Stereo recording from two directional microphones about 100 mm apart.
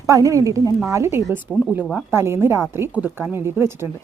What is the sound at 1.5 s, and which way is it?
Speech, 10° left (ahead or behind).